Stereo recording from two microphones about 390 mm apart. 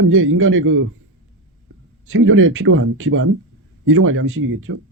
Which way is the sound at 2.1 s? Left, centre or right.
Right.